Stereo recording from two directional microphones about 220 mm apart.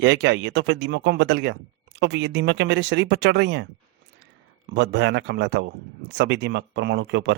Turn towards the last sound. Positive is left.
turn(degrees=-55)  # may be behind; listen again after turning